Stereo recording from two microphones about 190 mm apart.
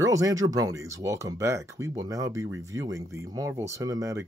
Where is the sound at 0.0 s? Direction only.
15° right (ahead or behind).